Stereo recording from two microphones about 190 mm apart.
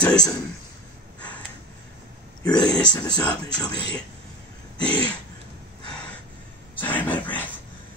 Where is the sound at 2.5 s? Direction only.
20° left (ahead or behind).